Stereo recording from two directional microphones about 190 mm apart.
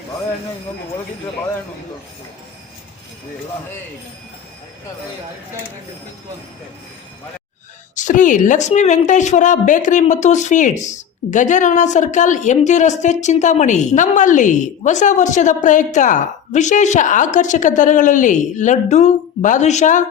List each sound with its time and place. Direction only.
7.9 s a woman's voice: 40° left (ahead or behind)